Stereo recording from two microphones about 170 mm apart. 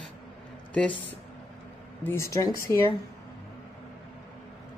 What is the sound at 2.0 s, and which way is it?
Speech, 15° left (ahead or behind).